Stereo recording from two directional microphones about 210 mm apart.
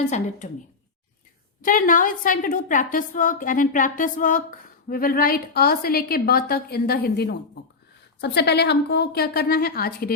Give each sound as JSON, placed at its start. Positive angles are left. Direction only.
{"t": 0.0, "sound": "a woman's voice", "side_deg": 35}
{"t": 1.6, "sound": "a woman's voice", "side_deg": 40}